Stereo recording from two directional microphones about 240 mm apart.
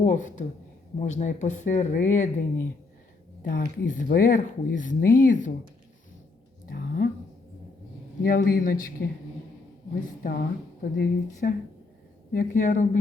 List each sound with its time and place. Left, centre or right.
0.0 s speech: left
3.4 s speech: left
6.7 s a sound: left
8.2 s speech: left
9.9 s speech: left